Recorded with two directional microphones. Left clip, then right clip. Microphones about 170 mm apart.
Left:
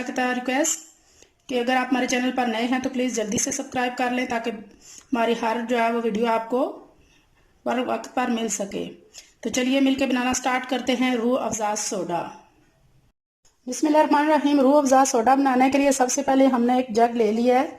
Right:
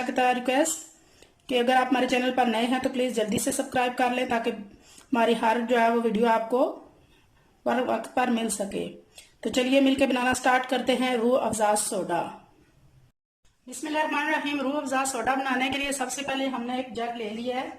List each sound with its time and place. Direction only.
0.0 s speech: centre (ahead or behind)
13.7 s speech: 40° left (ahead or behind)
16.6 s speech: 50° left (ahead or behind)